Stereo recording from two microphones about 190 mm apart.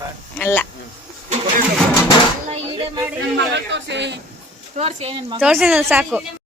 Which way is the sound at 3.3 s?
65° right (ahead or behind).